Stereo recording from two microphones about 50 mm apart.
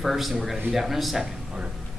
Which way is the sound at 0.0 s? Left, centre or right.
Centre.